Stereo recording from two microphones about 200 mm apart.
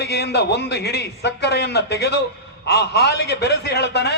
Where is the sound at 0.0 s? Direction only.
55° left (ahead or behind).